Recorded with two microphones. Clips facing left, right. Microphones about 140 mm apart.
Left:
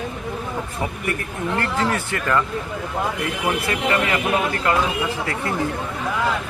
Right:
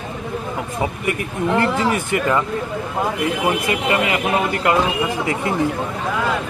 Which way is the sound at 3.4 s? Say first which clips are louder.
Even; 15° right (ahead or behind).